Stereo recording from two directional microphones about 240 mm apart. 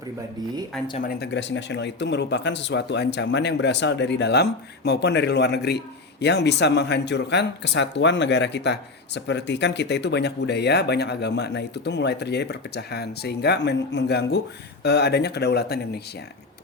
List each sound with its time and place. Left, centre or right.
0.9 s speech: left